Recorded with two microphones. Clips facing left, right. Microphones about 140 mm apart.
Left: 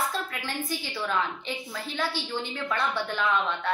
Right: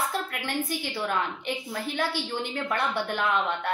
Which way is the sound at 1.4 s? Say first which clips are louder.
Right 3 dB; 55° right (ahead or behind).